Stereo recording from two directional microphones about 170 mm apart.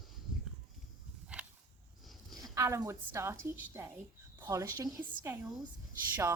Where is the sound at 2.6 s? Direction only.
15° right (ahead or behind).